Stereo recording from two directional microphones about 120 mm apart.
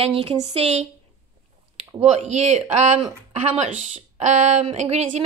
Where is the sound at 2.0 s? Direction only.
65° right (ahead or behind).